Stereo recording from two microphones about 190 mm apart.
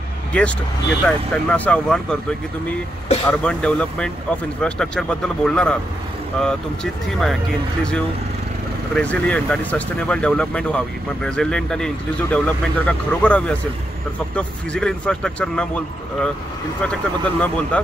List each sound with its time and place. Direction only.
0.3 s speech: 5° left (ahead or behind)
3.3 s speech: 5° left (ahead or behind)
8.9 s speech: 5° left (ahead or behind)